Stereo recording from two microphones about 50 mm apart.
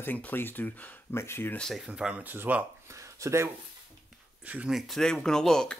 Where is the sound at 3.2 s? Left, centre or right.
Right.